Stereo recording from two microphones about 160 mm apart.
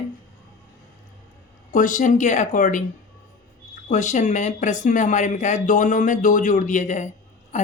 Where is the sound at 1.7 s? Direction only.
55° left (ahead or behind).